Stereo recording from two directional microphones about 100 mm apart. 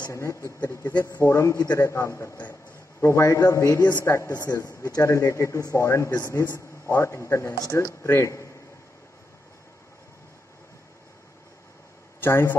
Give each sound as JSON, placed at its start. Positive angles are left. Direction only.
{"t": 0.1, "sound": "speech", "side_deg": 30}
{"t": 4.4, "sound": "speech", "side_deg": 40}
{"t": 12.2, "sound": "speech", "side_deg": 25}